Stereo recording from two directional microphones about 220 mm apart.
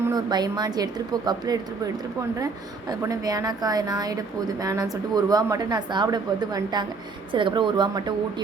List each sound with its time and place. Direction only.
0.0 s a woman's voice: 15° right (ahead or behind)
2.9 s a woman's voice: 15° right (ahead or behind)